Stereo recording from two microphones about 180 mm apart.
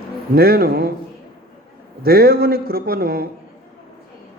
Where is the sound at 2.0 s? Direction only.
55° right (ahead or behind).